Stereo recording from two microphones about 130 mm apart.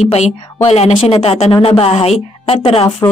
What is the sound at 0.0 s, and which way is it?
A woman's voice, 55° left (ahead or behind).